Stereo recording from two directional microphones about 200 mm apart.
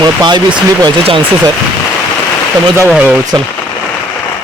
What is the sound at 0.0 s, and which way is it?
Speech, 20° right (ahead or behind).